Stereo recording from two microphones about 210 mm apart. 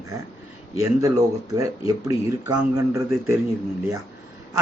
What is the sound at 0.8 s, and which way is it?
Speech, 15° right (ahead or behind).